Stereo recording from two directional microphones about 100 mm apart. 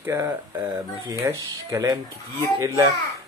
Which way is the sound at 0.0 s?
25° right (ahead or behind).